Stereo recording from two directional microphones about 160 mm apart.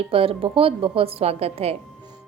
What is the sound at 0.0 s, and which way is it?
A woman's voice, 35° right (ahead or behind).